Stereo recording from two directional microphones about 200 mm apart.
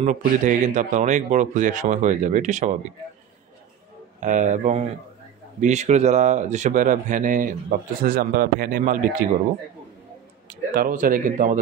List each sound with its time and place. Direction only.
0.0 s speech: 40° right (ahead or behind)
4.2 s speech: 40° right (ahead or behind)
10.7 s speech: 45° right (ahead or behind)